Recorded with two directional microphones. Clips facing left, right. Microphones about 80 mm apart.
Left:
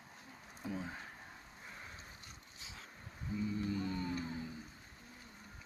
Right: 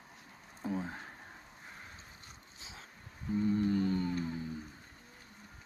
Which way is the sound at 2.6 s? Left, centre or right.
Right.